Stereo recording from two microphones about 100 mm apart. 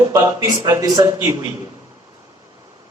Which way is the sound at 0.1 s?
35° right (ahead or behind).